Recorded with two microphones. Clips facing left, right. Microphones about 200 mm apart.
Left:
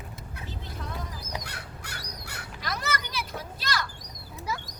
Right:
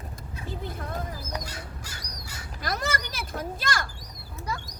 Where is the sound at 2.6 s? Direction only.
45° right (ahead or behind).